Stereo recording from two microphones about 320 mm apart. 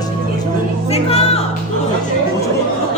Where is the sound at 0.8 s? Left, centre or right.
Centre.